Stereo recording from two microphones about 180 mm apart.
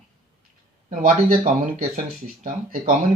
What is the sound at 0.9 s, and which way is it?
Speech, 50° right (ahead or behind).